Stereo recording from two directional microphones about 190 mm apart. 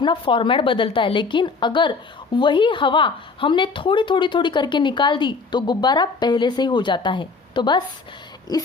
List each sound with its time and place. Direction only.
0.0 s a woman's voice: 25° left (ahead or behind)